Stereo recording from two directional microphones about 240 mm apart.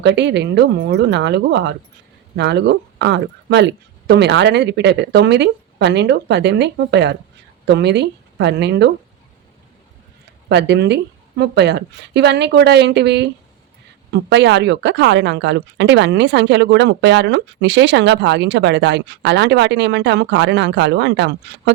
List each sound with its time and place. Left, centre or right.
0.0 s a woman's voice: right
10.2 s a woman's voice: right